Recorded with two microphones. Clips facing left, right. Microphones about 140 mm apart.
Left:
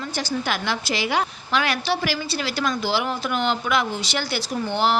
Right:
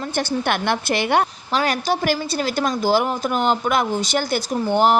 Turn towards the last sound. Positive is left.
turn(degrees=-45)  # may be behind; listen again after turning